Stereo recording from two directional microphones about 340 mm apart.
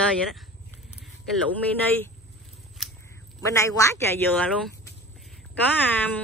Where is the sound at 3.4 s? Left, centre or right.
Centre.